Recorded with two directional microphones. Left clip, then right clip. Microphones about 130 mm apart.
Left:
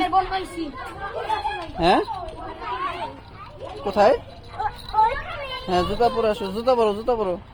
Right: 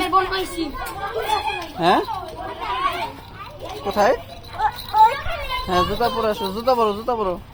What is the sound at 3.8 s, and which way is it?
Speech, 55° left (ahead or behind).